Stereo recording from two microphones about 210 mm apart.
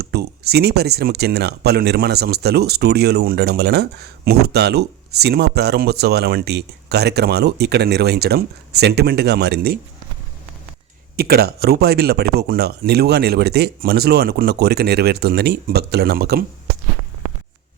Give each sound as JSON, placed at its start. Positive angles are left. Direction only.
{"t": 0.0, "sound": "speech", "side_deg": -50}
{"t": 11.2, "sound": "speech", "side_deg": -45}